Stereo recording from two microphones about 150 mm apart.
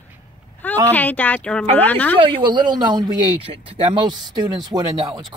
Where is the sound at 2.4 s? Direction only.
30° right (ahead or behind).